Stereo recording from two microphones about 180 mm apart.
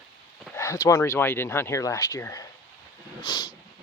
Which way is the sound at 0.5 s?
15° left (ahead or behind).